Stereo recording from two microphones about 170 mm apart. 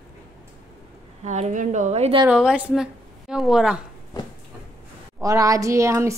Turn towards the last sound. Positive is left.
turn(degrees=-15)  # may be behind; listen again after turning